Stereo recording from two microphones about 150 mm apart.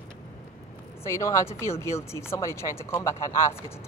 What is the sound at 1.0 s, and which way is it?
Speech, 20° left (ahead or behind).